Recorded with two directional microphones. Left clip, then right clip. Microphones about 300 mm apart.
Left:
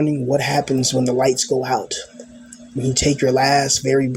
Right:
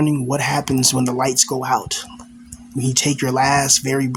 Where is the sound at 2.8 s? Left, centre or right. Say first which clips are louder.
Left 2 dB; centre.